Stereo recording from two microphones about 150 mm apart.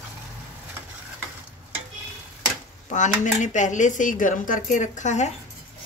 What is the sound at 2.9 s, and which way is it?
Speech, 55° left (ahead or behind).